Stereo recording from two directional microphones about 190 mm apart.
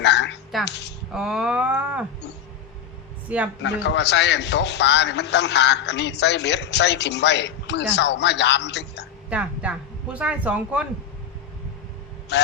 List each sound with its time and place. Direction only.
0.0 s music: 65° left (ahead or behind)
0.6 s a man's voice: 65° left (ahead or behind)
1.1 s a sound: centre (ahead or behind)
3.2 s speech: 5° right (ahead or behind)
3.6 s a man's voice: 65° left (ahead or behind)
9.3 s speech: 5° right (ahead or behind)
12.3 s a sound: 65° left (ahead or behind)